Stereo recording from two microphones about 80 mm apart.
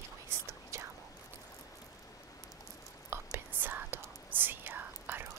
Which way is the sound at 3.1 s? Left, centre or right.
Right.